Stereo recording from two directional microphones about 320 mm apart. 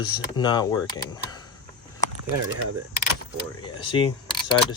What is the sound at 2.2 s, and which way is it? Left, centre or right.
Speech, right.